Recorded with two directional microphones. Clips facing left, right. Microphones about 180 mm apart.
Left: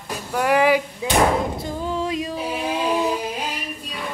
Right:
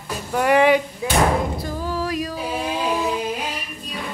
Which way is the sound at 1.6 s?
20° left (ahead or behind).